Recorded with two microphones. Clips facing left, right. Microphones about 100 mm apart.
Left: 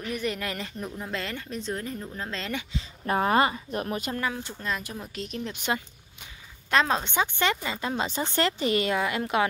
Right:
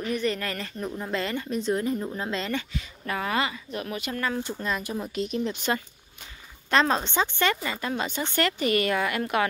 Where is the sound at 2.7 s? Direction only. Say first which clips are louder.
Even; 25° left (ahead or behind).